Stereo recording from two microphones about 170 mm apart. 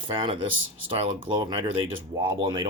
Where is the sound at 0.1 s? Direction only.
30° right (ahead or behind).